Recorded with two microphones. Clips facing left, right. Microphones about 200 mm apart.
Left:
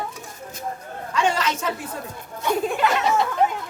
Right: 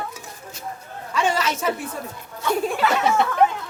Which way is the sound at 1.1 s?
10° right (ahead or behind).